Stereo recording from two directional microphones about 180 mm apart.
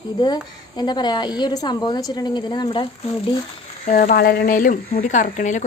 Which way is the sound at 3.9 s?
45° left (ahead or behind).